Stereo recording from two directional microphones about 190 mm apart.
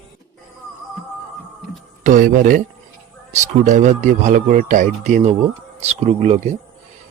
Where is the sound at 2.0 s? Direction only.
45° right (ahead or behind).